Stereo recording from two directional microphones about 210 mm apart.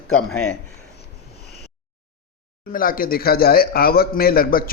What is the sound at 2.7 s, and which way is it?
Speech, 40° left (ahead or behind).